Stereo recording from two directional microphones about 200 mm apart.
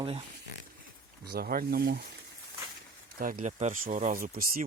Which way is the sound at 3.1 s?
45° right (ahead or behind).